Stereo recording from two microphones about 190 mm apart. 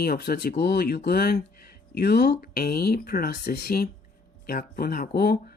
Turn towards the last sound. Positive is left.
turn(degrees=55)  # may be behind; listen again after turning